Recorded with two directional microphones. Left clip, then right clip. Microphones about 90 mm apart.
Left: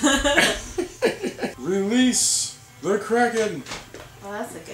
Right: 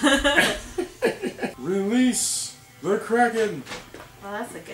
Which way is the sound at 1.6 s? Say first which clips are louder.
Left 1 dB; centre (ahead or behind).